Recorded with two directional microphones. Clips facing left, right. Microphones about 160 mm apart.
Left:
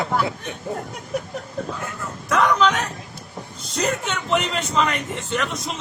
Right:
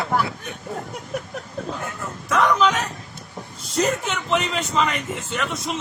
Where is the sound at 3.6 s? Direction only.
Centre (ahead or behind).